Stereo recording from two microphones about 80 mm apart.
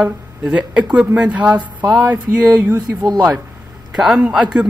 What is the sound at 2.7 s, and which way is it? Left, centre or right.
Speech, right.